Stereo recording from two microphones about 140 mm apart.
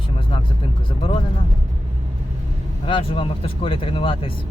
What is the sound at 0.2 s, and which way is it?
Vehicle, 40° left (ahead or behind).